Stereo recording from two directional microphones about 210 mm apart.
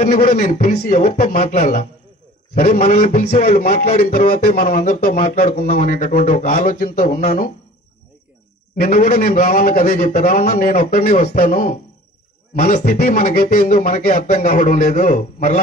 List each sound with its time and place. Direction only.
0.0 s speech: 45° left (ahead or behind)
2.6 s a sound: 45° left (ahead or behind)
5.7 s speech: 35° left (ahead or behind)
8.8 s speech: 40° left (ahead or behind)
11.3 s speech: 45° left (ahead or behind)